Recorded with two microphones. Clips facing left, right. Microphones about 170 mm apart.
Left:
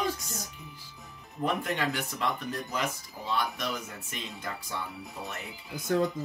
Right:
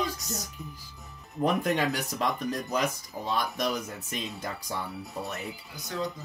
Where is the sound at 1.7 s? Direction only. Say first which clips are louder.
Right 3 dB; 40° right (ahead or behind).